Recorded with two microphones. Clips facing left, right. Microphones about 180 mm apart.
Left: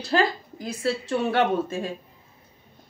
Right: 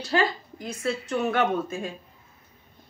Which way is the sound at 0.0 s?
35° left (ahead or behind).